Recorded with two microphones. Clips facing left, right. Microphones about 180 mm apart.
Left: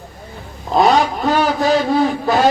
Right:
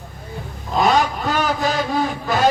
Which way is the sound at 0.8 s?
45° left (ahead or behind).